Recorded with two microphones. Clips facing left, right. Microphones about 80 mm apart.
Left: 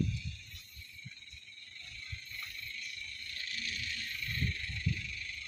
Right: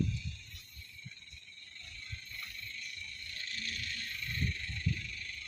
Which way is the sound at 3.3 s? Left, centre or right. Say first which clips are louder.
Left 1 dB; right.